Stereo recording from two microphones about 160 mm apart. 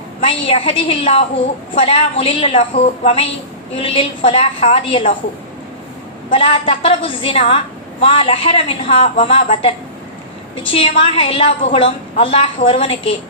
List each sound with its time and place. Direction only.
0.2 s a woman's voice: 35° left (ahead or behind)
6.3 s a woman's voice: 35° left (ahead or behind)